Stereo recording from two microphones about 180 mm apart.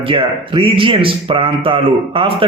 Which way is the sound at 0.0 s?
30° right (ahead or behind).